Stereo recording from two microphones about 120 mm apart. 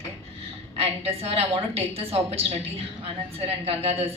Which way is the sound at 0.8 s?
60° right (ahead or behind).